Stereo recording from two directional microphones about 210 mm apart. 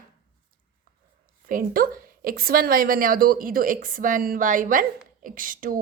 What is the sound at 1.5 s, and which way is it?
A woman's voice, 40° right (ahead or behind).